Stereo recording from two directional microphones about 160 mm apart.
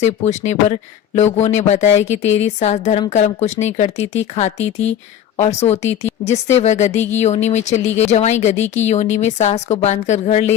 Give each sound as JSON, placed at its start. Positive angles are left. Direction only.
{"t": 0.0, "sound": "speech", "side_deg": 45}